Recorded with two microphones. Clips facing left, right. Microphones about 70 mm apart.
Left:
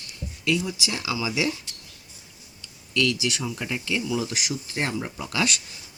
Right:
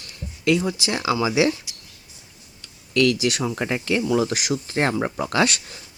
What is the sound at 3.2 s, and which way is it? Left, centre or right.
Speech, right.